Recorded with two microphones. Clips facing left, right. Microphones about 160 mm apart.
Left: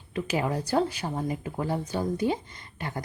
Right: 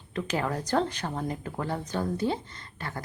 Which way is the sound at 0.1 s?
10° left (ahead or behind).